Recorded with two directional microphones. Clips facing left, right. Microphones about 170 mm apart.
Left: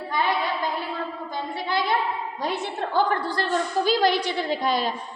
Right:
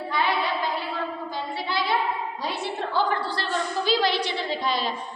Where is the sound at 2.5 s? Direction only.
45° left (ahead or behind).